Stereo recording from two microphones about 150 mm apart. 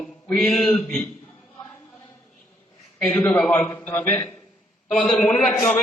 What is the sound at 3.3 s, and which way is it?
A man's voice, 5° left (ahead or behind).